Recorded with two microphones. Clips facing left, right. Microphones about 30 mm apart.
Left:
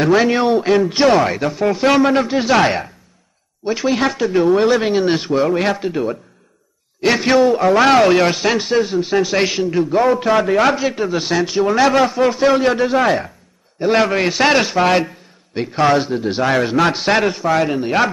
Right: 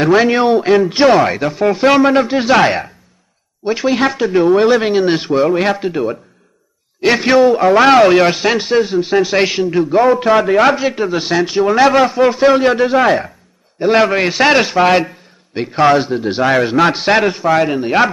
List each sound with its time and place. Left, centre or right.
0.0 s a man's voice: centre